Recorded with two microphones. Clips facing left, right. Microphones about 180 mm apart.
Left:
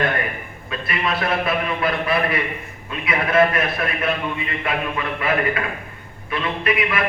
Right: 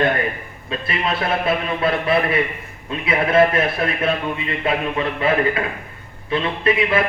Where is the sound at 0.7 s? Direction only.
25° right (ahead or behind).